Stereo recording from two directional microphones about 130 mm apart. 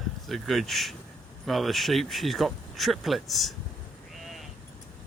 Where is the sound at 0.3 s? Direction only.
Centre (ahead or behind).